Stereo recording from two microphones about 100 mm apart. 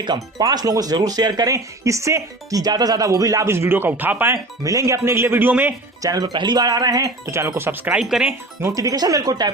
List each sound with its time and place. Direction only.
0.0 s speech: 45° right (ahead or behind); by 4.4 s 20° right (ahead or behind)
4.6 s speech: 35° right (ahead or behind); by 5.7 s 15° right (ahead or behind)
6.0 s speech: 40° right (ahead or behind); by 8.0 s 20° right (ahead or behind)
8.6 s speech: 35° right (ahead or behind)